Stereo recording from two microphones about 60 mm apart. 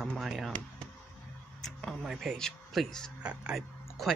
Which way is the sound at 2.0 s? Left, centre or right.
Centre.